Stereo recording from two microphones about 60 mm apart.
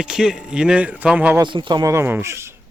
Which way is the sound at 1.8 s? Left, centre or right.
Right.